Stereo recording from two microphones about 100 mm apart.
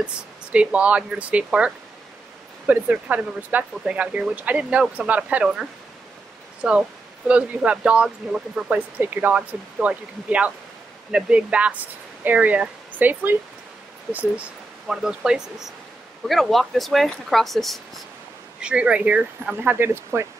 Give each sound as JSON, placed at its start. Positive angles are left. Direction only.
{"t": 0.0, "sound": "speech", "side_deg": -10}
{"t": 14.9, "sound": "speech", "side_deg": -5}
{"t": 18.6, "sound": "speech", "side_deg": -10}